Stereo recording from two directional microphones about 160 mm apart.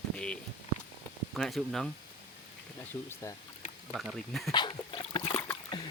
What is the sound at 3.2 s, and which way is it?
Speech, 20° left (ahead or behind).